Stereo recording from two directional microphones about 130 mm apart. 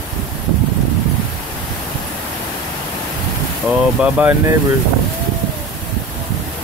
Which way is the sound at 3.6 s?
10° right (ahead or behind).